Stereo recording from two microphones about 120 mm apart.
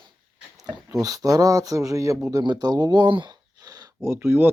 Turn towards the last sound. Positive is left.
turn(degrees=-15)  # may be behind; listen again after turning